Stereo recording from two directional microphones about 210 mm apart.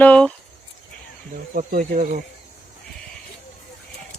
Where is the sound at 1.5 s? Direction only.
40° right (ahead or behind).